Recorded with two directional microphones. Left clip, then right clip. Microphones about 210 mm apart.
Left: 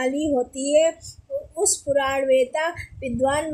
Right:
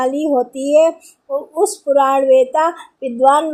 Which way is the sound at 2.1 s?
20° right (ahead or behind).